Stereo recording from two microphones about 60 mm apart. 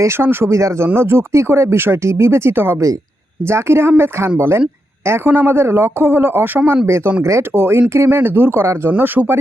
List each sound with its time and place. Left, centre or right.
0.0 s a man's voice: right
0.4 s speech: right
0.9 s a man's voice: right
6.8 s a man's voice: right